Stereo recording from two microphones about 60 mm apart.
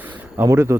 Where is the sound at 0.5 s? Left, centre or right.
Right.